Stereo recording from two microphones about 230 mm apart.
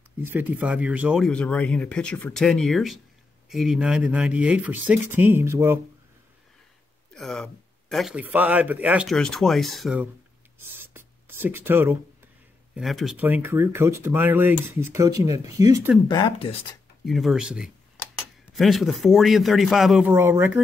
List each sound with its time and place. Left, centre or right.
0.3 s speech: centre
7.2 s a man's voice: centre
10.8 s writing: centre
12.7 s speech: centre
16.1 s speech: centre
17.0 s speech: centre